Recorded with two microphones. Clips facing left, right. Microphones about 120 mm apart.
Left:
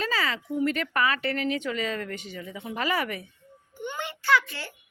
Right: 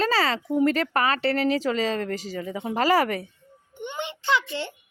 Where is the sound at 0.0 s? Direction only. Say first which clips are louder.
Right 6 dB; 35° right (ahead or behind).